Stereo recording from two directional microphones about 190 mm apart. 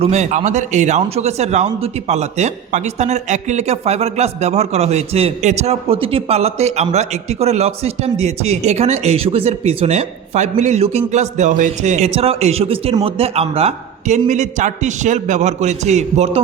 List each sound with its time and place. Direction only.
0.0 s speech: 35° right (ahead or behind)